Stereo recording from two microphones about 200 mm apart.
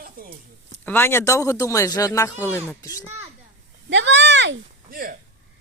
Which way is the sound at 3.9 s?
65° right (ahead or behind).